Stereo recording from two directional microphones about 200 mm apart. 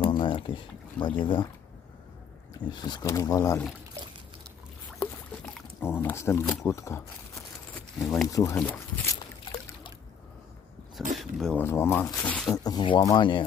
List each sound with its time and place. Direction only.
0.0 s a sound: 25° left (ahead or behind)
0.9 s speech: 25° left (ahead or behind)
2.7 s speech: 20° left (ahead or behind)
4.9 s rowboat: 5° left (ahead or behind)
6.6 s crumpling: 15° left (ahead or behind)
8.3 s speech: 15° left (ahead or behind)
9.4 s trickle: 25° left (ahead or behind)
11.1 s speech: centre (ahead or behind)
12.5 s speech: 20° left (ahead or behind)